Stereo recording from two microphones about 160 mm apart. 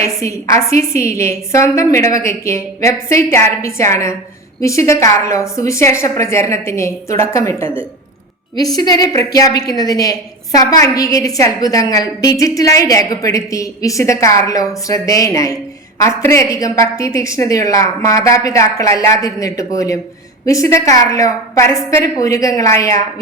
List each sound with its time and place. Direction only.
0.0 s a woman's voice: 20° left (ahead or behind)